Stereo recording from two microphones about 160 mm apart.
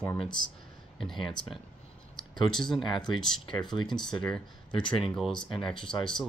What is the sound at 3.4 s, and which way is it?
Speech, 30° left (ahead or behind).